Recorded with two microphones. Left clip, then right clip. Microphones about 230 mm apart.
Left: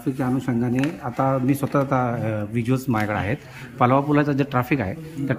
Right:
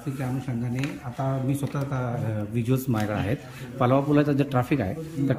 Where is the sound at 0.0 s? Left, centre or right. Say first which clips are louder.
Left 8 dB; left.